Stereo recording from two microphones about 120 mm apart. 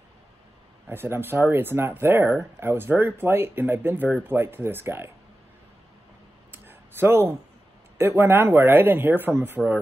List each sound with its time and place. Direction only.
0.8 s speech: 20° right (ahead or behind)
6.5 s a sound: 15° right (ahead or behind)
8.0 s speech: 20° right (ahead or behind)